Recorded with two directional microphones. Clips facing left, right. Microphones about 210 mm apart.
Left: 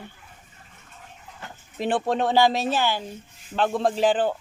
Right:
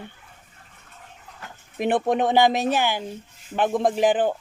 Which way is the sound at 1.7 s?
20° right (ahead or behind).